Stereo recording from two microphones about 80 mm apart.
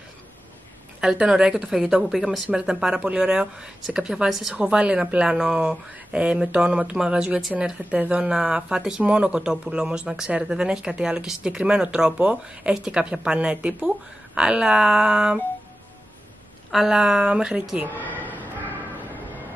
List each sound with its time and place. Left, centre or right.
1.0 s speech: centre
16.7 s speech: centre
17.9 s speech: left